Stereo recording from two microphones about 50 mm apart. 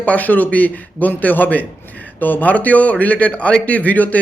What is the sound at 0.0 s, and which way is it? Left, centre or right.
A man's voice, left.